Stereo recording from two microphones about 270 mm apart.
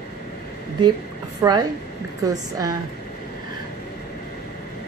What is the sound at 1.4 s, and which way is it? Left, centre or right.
Speech, centre.